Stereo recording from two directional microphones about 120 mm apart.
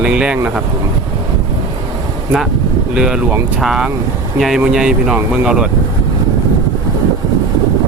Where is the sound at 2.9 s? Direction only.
5° right (ahead or behind).